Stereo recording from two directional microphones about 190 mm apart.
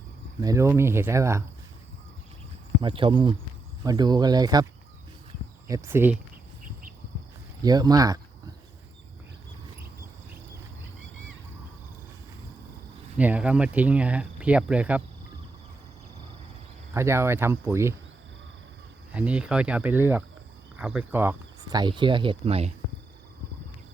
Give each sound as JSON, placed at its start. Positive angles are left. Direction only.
{"t": 0.4, "sound": "speech", "side_deg": -15}
{"t": 2.8, "sound": "speech", "side_deg": -25}
{"t": 5.6, "sound": "speech", "side_deg": -15}
{"t": 7.6, "sound": "speech", "side_deg": -20}
{"t": 13.1, "sound": "speech", "side_deg": -5}
{"t": 16.9, "sound": "speech", "side_deg": -15}
{"t": 19.1, "sound": "speech", "side_deg": -5}
{"t": 21.7, "sound": "speech", "side_deg": -25}